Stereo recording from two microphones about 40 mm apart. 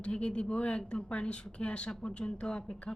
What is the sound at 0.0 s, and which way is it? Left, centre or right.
A woman's voice, left.